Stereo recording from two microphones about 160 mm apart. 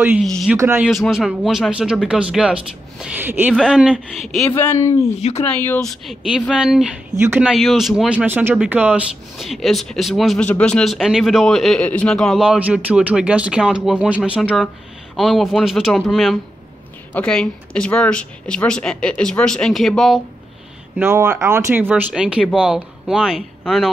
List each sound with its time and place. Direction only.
0.2 s speech: centre (ahead or behind)
0.6 s speech: 15° right (ahead or behind)
0.8 s speech: centre (ahead or behind)
4.6 s speech: 15° left (ahead or behind)
6.0 s speech: centre (ahead or behind)
7.5 s speech: centre (ahead or behind)
21.0 s speech: 15° right (ahead or behind)